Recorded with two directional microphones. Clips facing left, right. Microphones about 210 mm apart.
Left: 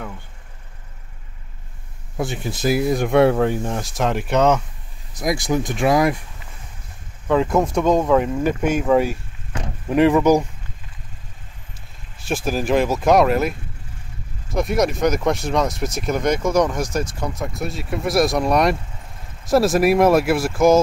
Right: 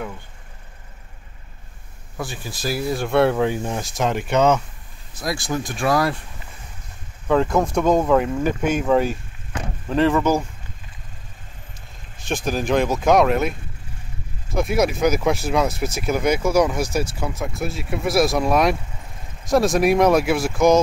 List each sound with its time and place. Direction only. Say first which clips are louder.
2.1 s speech: left 6 dB; 20° left (ahead or behind)
3.3 s speech: left 1 dB; centre (ahead or behind)
5.2 s speech: left 4 dB; 20° left (ahead or behind)
7.2 s speech: left 1 dB; 5° left (ahead or behind)
9.8 s speech: left 4 dB; 15° left (ahead or behind)
12.2 s speech: left 1 dB; 5° left (ahead or behind)